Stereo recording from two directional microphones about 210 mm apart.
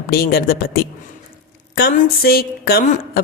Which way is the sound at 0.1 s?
45° left (ahead or behind).